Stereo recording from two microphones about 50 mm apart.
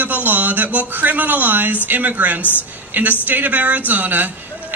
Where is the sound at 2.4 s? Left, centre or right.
Left.